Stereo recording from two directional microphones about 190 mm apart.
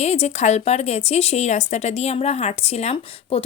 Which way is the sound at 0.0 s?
35° left (ahead or behind).